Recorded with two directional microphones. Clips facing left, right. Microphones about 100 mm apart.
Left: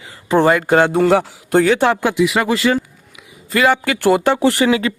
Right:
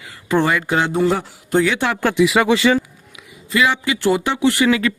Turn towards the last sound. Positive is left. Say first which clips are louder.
# left 1 dB
turn(degrees=30)  # may be behind; listen again after turning